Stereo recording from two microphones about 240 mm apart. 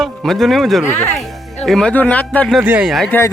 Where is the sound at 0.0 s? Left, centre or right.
Centre.